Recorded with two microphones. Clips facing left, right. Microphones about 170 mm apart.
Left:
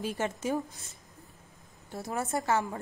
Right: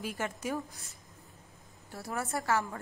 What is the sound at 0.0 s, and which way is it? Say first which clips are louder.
A woman's voice: left 4 dB; 25° left (ahead or behind).